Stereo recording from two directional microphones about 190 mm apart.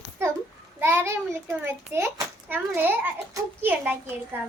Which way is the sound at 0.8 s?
10° right (ahead or behind).